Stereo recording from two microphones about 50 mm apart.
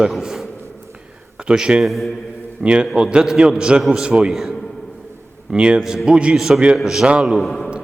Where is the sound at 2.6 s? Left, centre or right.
Right.